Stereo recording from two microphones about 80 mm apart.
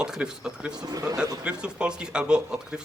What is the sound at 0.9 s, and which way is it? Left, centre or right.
Speech, right.